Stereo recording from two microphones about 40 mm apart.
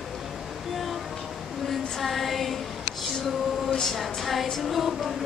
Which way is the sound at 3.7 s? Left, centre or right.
Centre.